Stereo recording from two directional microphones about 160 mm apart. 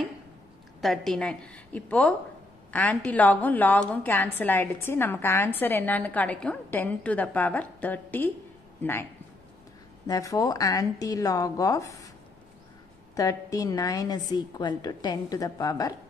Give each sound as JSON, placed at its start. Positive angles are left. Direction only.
{"t": 0.7, "sound": "a woman's voice", "side_deg": 0}
{"t": 10.0, "sound": "a woman's voice", "side_deg": 25}
{"t": 13.1, "sound": "a woman's voice", "side_deg": 20}